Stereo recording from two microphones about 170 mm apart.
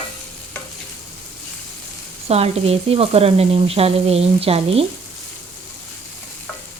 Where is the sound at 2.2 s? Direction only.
35° right (ahead or behind).